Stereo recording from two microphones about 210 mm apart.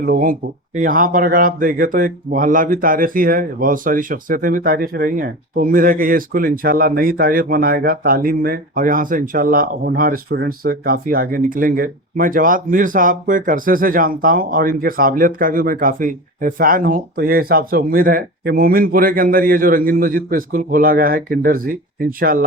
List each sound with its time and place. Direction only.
0.0 s speech: 45° right (ahead or behind)